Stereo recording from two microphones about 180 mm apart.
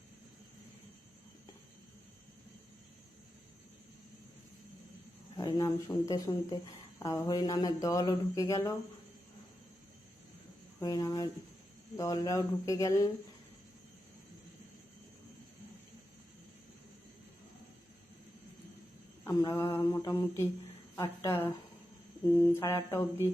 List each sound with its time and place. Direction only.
5.4 s speech: 20° left (ahead or behind)
7.0 s mantra: 20° left (ahead or behind)
10.8 s mantra: 20° left (ahead or behind)
19.2 s mantra: 15° left (ahead or behind)